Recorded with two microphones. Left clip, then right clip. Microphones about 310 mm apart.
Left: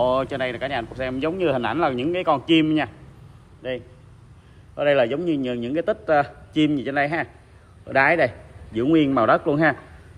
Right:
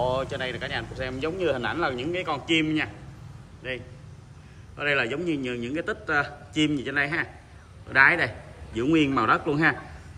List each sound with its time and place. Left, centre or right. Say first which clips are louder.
0.0 s speech: left 6 dB; left
4.7 s a man's voice: left 6 dB; centre